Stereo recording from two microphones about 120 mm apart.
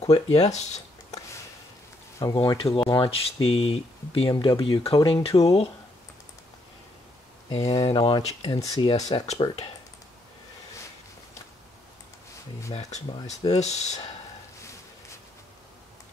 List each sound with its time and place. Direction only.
0.0 s speech: 60° left (ahead or behind)
2.3 s speech: 45° left (ahead or behind)
4.3 s speech: 40° left (ahead or behind)
5.4 s speech: 55° left (ahead or behind)
7.6 s speech: 45° left (ahead or behind)
8.5 s speech: 30° left (ahead or behind)
8.9 s speech: 65° left (ahead or behind)
12.7 s speech: 70° left (ahead or behind)